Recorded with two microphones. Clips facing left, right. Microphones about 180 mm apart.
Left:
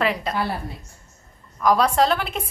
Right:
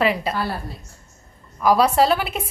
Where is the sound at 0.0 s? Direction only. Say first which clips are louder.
Right 3 dB; 5° right (ahead or behind).